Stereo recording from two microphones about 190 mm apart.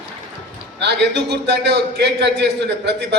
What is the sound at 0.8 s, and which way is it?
A man's voice, 65° right (ahead or behind).